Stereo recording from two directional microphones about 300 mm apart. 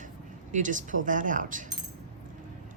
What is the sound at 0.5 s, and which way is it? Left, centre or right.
Speech, right.